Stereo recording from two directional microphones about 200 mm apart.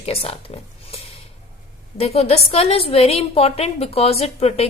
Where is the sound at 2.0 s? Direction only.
30° left (ahead or behind).